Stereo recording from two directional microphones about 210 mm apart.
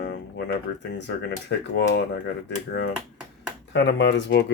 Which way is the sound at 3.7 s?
55° left (ahead or behind).